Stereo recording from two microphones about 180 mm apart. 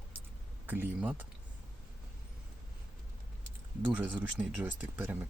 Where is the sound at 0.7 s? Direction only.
10° right (ahead or behind).